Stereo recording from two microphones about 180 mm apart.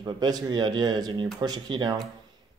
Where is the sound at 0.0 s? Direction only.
20° right (ahead or behind).